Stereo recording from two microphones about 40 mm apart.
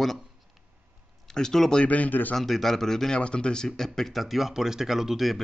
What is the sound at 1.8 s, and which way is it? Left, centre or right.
Speech, left.